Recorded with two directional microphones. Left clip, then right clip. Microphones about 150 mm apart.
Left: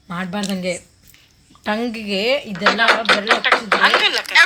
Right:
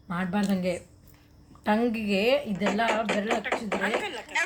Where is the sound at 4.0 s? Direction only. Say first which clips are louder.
Left 15 dB; 90° left.